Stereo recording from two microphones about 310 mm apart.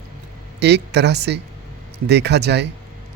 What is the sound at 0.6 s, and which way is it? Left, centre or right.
Speech, right.